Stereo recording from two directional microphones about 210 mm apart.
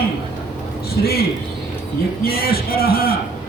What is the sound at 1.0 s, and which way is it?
A man's voice, 45° left (ahead or behind).